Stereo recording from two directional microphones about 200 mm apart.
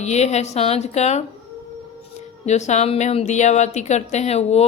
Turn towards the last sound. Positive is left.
turn(degrees=35)  # may be behind; listen again after turning